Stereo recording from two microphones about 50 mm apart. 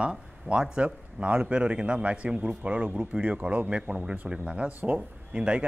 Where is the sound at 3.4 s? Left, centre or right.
Right.